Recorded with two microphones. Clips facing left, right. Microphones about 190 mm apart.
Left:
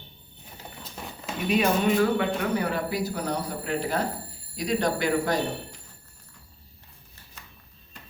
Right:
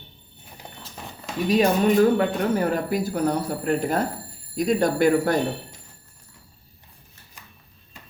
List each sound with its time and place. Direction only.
1.5 s speech: 40° right (ahead or behind)